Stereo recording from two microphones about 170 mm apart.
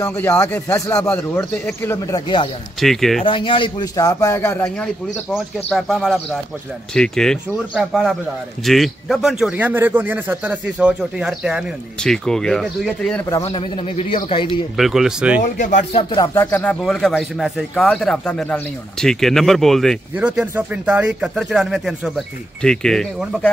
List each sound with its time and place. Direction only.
0.0 s speech: 10° left (ahead or behind); by 2.5 s 30° left (ahead or behind)
2.8 s a man's voice: centre (ahead or behind)
3.3 s a man's voice: 30° left (ahead or behind); by 13.2 s centre (ahead or behind)
13.4 s speech: 35° left (ahead or behind)
14.8 s a man's voice: centre (ahead or behind)
15.4 s speech: 50° left (ahead or behind)
16.0 s speech: 30° left (ahead or behind)
16.3 s a man's voice: 10° left (ahead or behind)